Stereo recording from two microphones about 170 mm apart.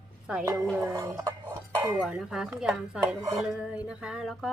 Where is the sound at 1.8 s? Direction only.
5° right (ahead or behind).